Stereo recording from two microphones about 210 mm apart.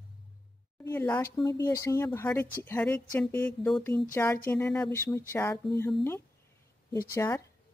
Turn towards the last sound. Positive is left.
turn(degrees=15)  # may be behind; listen again after turning